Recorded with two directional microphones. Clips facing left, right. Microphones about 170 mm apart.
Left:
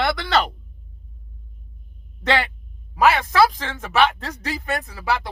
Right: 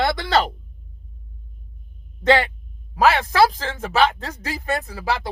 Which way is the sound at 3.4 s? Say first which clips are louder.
Right 1 dB; 35° right (ahead or behind).